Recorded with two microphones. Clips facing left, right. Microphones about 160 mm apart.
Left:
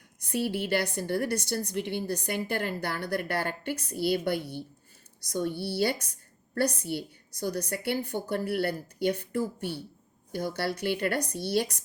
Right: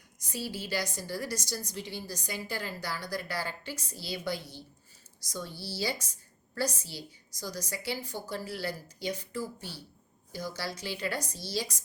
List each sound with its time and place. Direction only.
0.2 s a woman's voice: 60° left (ahead or behind)